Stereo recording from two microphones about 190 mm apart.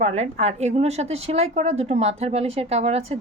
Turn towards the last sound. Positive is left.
turn(degrees=-35)  # may be behind; listen again after turning